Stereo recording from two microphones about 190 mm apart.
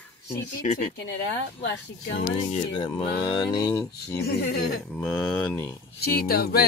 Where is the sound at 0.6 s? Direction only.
40° left (ahead or behind).